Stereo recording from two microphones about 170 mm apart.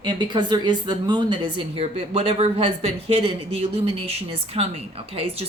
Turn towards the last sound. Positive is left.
turn(degrees=-35)  # may be behind; listen again after turning